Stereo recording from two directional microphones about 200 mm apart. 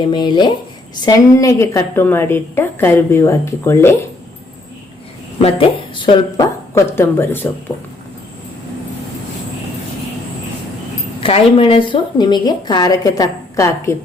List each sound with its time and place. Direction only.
0.0 s a woman's voice: 20° left (ahead or behind)
5.4 s a woman's voice: 30° left (ahead or behind); by 7.4 s 10° left (ahead or behind)
11.2 s a woman's voice: 30° left (ahead or behind)